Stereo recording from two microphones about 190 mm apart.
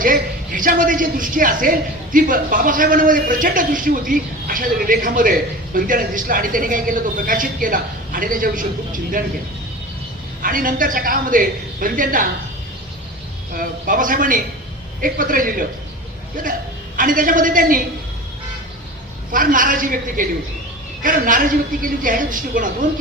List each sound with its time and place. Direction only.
0.0 s speech: 45° right (ahead or behind)
10.4 s speech: 45° right (ahead or behind)
13.6 s speech: 45° right (ahead or behind)
17.0 s speech: 45° right (ahead or behind)
19.3 s speech: 45° right (ahead or behind)